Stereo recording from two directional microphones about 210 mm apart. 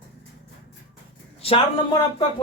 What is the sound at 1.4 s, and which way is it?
Speech, 25° left (ahead or behind).